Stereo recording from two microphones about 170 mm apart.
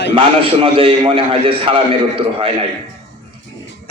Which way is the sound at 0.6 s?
30° right (ahead or behind).